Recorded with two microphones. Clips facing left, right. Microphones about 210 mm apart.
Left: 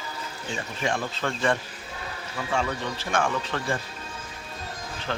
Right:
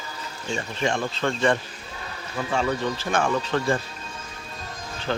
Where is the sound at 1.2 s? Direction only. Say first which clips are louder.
Right 5 dB; 30° right (ahead or behind).